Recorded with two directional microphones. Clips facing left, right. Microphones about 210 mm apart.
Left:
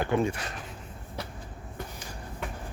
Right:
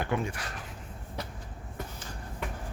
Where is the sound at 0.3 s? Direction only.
25° left (ahead or behind).